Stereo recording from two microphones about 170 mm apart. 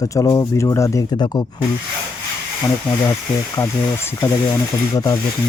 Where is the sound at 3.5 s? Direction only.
15° left (ahead or behind).